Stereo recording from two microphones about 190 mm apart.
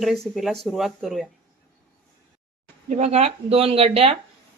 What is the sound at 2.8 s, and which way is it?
Speech, 35° right (ahead or behind).